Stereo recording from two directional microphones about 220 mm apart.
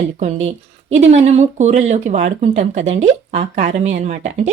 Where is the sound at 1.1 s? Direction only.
30° right (ahead or behind).